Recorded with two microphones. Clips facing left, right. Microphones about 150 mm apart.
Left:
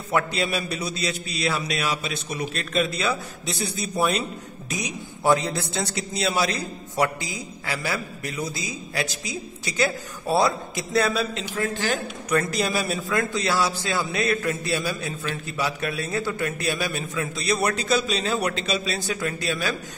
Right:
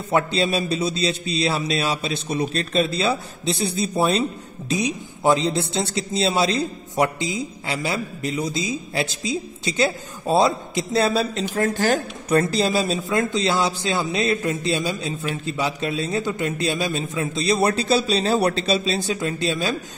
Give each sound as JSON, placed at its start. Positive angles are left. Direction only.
{"t": 0.1, "sound": "a man's voice", "side_deg": -25}
{"t": 11.4, "sound": "a woman's voice", "side_deg": -40}
{"t": 12.3, "sound": "a man's voice", "side_deg": -30}